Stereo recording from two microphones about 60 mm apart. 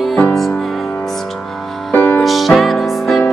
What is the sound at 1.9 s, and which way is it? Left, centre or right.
Music, left.